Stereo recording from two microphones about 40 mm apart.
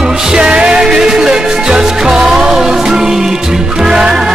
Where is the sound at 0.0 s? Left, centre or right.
Centre.